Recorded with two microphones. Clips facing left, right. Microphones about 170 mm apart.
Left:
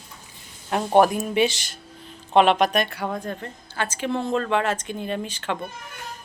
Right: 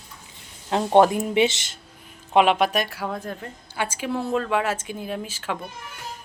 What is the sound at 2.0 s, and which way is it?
A woman's voice, 5° right (ahead or behind).